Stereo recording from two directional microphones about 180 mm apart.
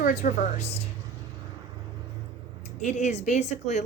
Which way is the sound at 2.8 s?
40° left (ahead or behind).